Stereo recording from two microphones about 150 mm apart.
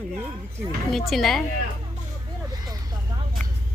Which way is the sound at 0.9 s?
Centre (ahead or behind).